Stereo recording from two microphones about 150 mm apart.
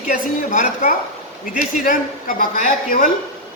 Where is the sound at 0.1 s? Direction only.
60° left (ahead or behind).